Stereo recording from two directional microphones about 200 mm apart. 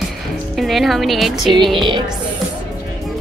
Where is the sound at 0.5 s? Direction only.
Centre (ahead or behind).